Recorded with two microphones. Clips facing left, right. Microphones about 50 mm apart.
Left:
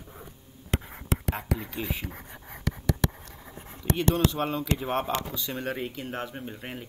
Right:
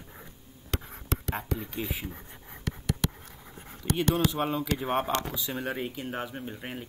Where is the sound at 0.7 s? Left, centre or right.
Left.